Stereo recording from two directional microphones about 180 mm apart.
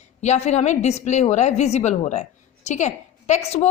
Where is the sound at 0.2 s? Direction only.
40° left (ahead or behind).